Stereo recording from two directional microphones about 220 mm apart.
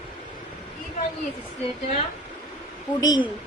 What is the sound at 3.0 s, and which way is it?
Speech, 15° left (ahead or behind).